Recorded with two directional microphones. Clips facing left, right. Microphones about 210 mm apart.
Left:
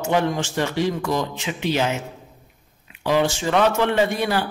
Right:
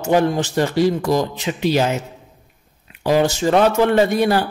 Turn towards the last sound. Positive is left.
turn(degrees=-40)  # may be behind; listen again after turning